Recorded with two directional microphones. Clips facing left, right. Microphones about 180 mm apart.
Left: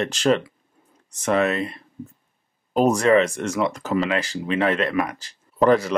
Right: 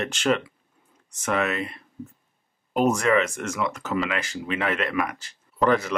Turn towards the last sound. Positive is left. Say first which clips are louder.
# left 4 dB
turn(degrees=35)  # may be behind; listen again after turning